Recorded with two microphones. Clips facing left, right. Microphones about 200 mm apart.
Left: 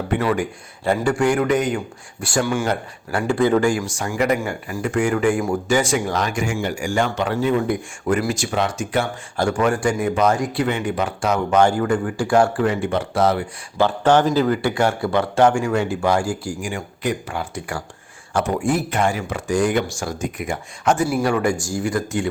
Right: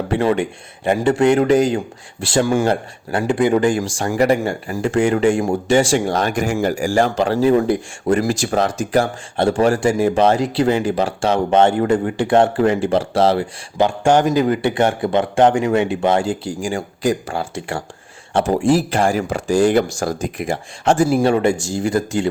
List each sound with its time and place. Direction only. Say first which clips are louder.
0.1 s a man's voice: right 3 dB; 30° right (ahead or behind)
3.2 s speech: right 2 dB; 15° right (ahead or behind)
3.9 s a man's voice: right 4 dB; 35° right (ahead or behind)
13.7 s a man's voice: right 1 dB; 15° right (ahead or behind)